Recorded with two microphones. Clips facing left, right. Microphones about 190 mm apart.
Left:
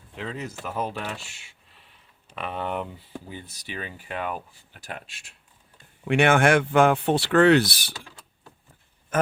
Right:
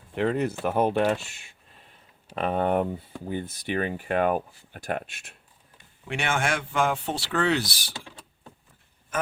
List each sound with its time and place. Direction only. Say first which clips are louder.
0.2 s speech: right 9 dB; 60° right (ahead or behind)
6.1 s speech: left 9 dB; 60° left (ahead or behind)